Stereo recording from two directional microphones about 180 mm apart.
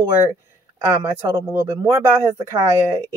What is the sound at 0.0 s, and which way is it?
Speech, 20° right (ahead or behind).